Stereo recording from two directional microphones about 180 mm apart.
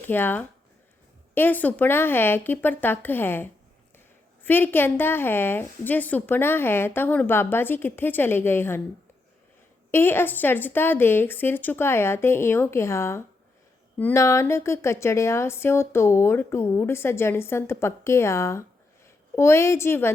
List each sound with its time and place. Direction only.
0.0 s a woman's voice: 10° left (ahead or behind)
9.9 s a woman's voice: 10° left (ahead or behind)